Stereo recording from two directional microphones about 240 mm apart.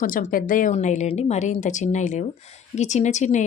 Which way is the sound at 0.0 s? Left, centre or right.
Left.